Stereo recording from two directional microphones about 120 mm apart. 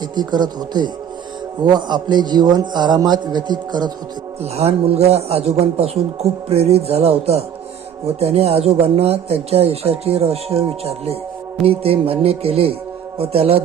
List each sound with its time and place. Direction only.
0.2 s a man's voice: 35° right (ahead or behind)
4.5 s speech: 60° right (ahead or behind)
11.6 s music: 50° right (ahead or behind)
13.1 s speech: 55° right (ahead or behind)